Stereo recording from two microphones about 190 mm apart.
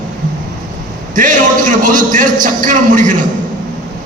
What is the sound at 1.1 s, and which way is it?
A man's voice, 45° right (ahead or behind).